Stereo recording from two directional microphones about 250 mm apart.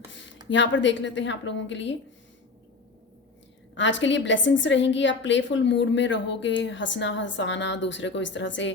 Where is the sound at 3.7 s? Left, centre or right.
Left.